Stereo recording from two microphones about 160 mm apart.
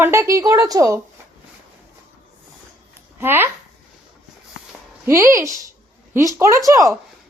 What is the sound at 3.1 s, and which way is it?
Speech, 15° right (ahead or behind).